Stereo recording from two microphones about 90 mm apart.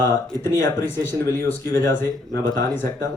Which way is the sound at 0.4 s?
30° left (ahead or behind).